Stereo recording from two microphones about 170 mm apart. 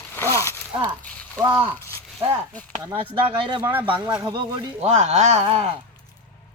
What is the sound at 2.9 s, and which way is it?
Speech, 30° right (ahead or behind).